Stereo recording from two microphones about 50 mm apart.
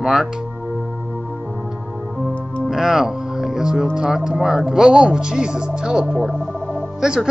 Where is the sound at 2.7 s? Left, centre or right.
Centre.